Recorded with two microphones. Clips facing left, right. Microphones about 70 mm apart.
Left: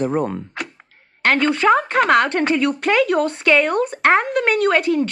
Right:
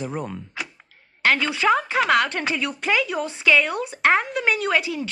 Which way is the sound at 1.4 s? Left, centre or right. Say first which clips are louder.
Left 5 dB; centre.